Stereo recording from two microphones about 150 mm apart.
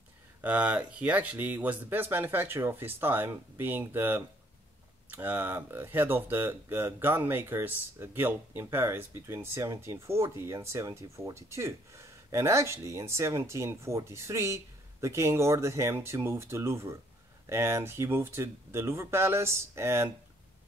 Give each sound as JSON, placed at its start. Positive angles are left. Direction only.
{"t": 0.4, "sound": "speech", "side_deg": -10}